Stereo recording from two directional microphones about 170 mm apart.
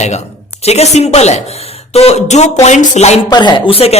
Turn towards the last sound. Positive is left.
turn(degrees=35)  # may be behind; listen again after turning